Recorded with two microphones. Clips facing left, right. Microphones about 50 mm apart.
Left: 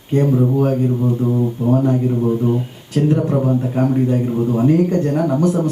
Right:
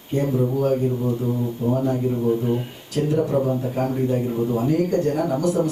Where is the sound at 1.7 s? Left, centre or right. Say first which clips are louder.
Left 6 dB; left.